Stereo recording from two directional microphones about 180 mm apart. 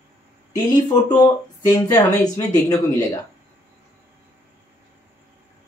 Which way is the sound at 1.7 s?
15° left (ahead or behind).